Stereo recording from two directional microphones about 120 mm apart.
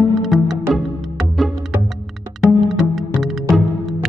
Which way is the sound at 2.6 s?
Centre (ahead or behind).